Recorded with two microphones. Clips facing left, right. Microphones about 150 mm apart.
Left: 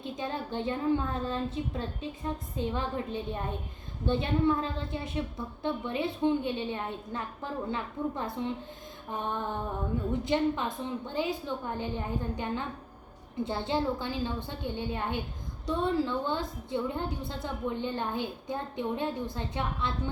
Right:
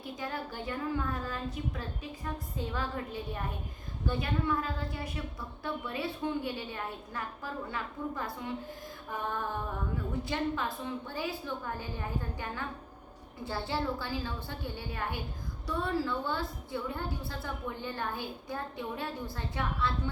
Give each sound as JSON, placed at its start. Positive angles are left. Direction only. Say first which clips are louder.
{"t": 0.0, "sound": "a woman's voice", "louder": "left 3 dB", "side_deg": 25}